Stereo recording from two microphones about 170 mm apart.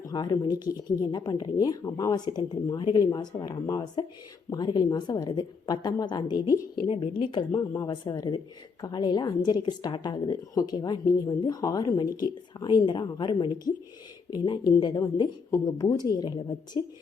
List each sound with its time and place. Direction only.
0.0 s a woman's voice: 25° left (ahead or behind)